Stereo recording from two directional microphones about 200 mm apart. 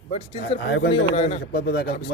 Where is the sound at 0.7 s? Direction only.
60° left (ahead or behind).